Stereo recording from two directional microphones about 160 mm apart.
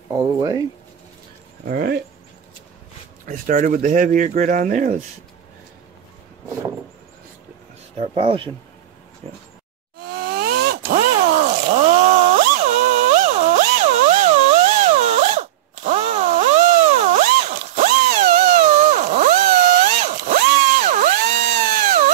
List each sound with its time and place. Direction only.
0.1 s speech: 20° right (ahead or behind)
1.6 s speech: 65° right (ahead or behind)
3.3 s speech: 55° right (ahead or behind)
8.0 s speech: 35° right (ahead or behind)
10.1 s a sound: 80° right
10.9 s a sound: 50° right (ahead or behind)